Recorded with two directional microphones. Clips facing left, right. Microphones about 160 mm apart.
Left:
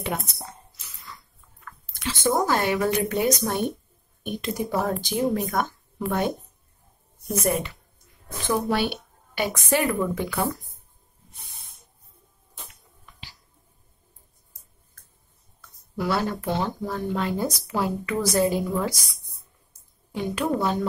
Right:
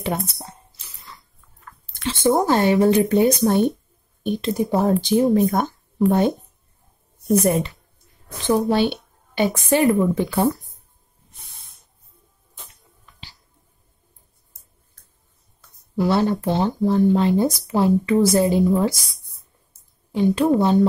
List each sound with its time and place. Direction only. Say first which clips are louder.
0.3 s chewing: right 1 dB; 30° right (ahead or behind)
4.3 s speech: right 6 dB; 30° right (ahead or behind)
7.3 s speech: right 6 dB; 30° right (ahead or behind)
16.0 s speech: right 7 dB; 30° right (ahead or behind)
20.1 s speech: right 8 dB; 25° right (ahead or behind)